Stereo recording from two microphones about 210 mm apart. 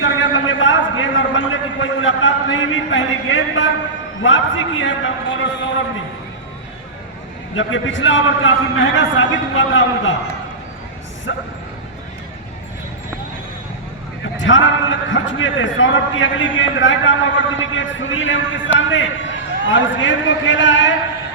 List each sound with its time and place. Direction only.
0.0 s a sound: 65° left (ahead or behind)
4.2 s a man's voice: 65° left (ahead or behind)
7.5 s a man's voice: 65° left (ahead or behind)
11.3 s a man's voice: 65° left (ahead or behind)
14.3 s a man's voice: 65° left (ahead or behind)